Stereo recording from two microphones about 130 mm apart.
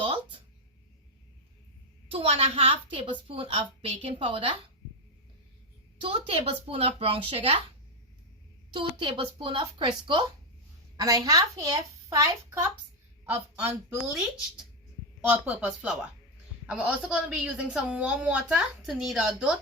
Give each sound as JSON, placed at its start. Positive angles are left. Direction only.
{"t": 0.0, "sound": "a sound", "side_deg": -40}
{"t": 2.0, "sound": "a woman's voice", "side_deg": -50}
{"t": 6.0, "sound": "a woman's voice", "side_deg": -45}
{"t": 8.7, "sound": "a woman's voice", "side_deg": -40}
{"t": 10.9, "sound": "a woman's voice", "side_deg": -30}
{"t": 13.2, "sound": "speech", "side_deg": -10}
{"t": 15.2, "sound": "a woman's voice", "side_deg": -10}